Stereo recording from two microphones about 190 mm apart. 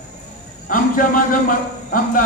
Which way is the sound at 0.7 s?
45° left (ahead or behind).